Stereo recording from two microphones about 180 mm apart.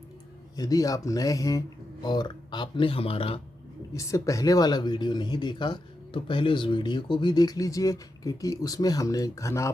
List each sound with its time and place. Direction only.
0.5 s speech: 20° left (ahead or behind)
3.9 s speech: 20° left (ahead or behind)